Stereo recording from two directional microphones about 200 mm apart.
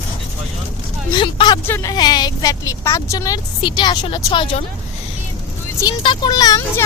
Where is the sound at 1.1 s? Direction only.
25° left (ahead or behind).